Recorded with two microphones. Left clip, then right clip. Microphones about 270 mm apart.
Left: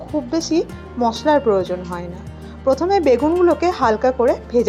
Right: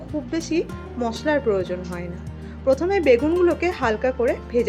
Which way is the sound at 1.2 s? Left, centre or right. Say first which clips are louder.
Left 5 dB; centre.